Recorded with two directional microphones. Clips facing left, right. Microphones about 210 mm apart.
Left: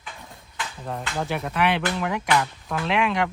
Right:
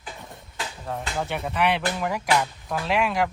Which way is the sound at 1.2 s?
Centre (ahead or behind).